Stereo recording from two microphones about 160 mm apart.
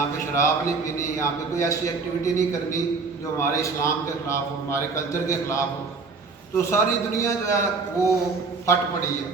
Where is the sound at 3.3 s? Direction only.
15° left (ahead or behind).